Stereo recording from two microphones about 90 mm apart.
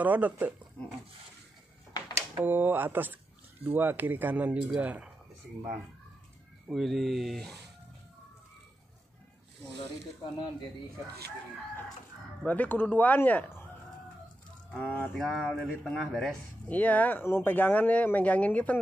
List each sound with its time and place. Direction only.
0.0 s speech: 20° right (ahead or behind)
2.4 s speech: 20° right (ahead or behind)
6.7 s speech: centre (ahead or behind)
12.4 s speech: 20° left (ahead or behind)
14.8 s speech: 15° left (ahead or behind)
15.1 s speech: 5° left (ahead or behind)
16.6 s speech: 15° left (ahead or behind)